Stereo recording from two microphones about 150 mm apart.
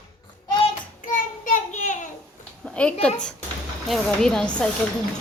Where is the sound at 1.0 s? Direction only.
60° left (ahead or behind).